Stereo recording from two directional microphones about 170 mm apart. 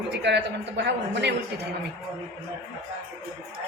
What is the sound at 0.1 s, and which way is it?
Speech, 90° right.